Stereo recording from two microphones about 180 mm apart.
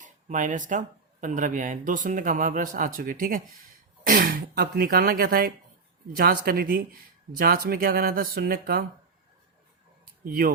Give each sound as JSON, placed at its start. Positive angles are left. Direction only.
{"t": 0.0, "sound": "speech", "side_deg": -45}
{"t": 10.2, "sound": "speech", "side_deg": -55}